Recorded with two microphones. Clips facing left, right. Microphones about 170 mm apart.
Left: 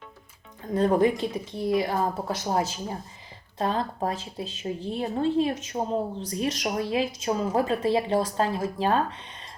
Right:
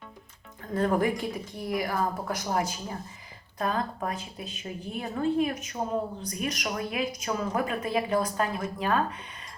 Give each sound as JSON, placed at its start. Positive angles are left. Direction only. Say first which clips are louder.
{"t": 0.7, "sound": "a woman's voice", "louder": "left 4 dB", "side_deg": 20}